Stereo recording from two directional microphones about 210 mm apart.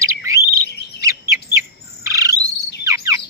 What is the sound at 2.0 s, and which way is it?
Bird, 15° right (ahead or behind).